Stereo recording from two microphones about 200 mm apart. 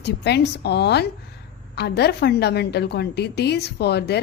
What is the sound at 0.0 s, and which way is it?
A woman's voice, 55° left (ahead or behind).